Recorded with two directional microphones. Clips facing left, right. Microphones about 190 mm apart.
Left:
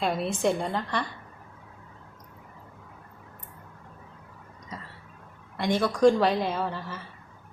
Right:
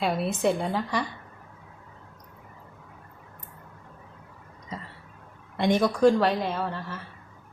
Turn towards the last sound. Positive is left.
turn(degrees=0)  # may be behind; listen again after turning